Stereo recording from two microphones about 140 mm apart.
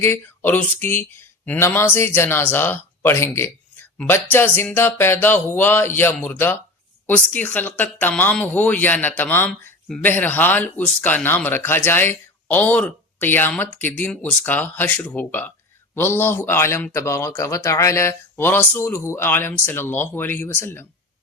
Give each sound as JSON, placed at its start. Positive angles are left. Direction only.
{"t": 0.0, "sound": "speech", "side_deg": 15}